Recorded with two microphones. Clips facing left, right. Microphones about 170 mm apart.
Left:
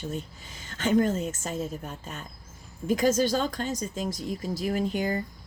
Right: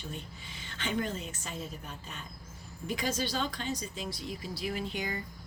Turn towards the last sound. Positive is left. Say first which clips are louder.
# left 8 dB
turn(degrees=45)  # may be behind; listen again after turning